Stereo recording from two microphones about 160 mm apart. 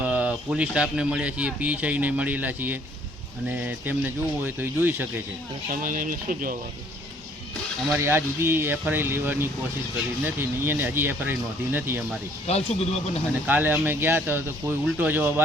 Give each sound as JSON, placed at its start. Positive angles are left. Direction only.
{"t": 0.0, "sound": "speech", "side_deg": -10}
{"t": 5.7, "sound": "speech", "side_deg": -60}
{"t": 7.9, "sound": "speech", "side_deg": -15}
{"t": 12.5, "sound": "speech", "side_deg": 40}
{"t": 13.5, "sound": "speech", "side_deg": -10}